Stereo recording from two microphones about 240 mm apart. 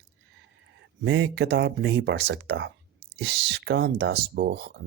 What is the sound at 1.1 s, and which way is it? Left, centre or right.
Speech, right.